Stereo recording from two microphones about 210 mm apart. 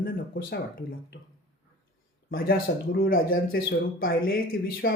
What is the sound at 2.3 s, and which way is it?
Speech, 45° left (ahead or behind).